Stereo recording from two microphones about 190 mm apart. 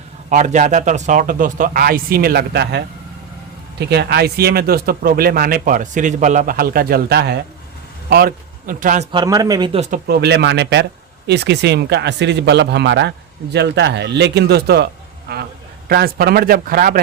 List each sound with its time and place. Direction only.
0.3 s a man's voice: 40° right (ahead or behind)
9.1 s speech: 20° right (ahead or behind)
9.9 s speech: 60° right (ahead or behind)
15.9 s speech: 55° right (ahead or behind)